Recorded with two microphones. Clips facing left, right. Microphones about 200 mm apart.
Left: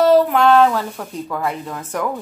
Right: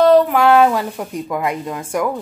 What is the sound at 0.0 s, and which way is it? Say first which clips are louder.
A woman's voice: right 1 dB; 5° left (ahead or behind).